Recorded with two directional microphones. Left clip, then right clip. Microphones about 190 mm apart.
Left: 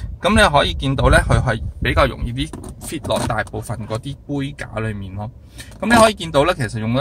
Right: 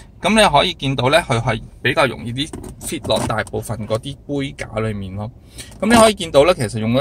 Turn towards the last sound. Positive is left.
turn(degrees=-15)  # may be behind; listen again after turning